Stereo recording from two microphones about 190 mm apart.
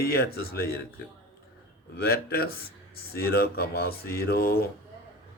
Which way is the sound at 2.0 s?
55° left (ahead or behind).